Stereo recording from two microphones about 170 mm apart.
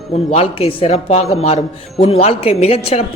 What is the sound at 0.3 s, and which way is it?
Speech, 35° left (ahead or behind).